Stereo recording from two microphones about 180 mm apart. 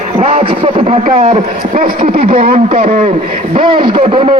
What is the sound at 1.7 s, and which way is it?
Speech, 50° right (ahead or behind).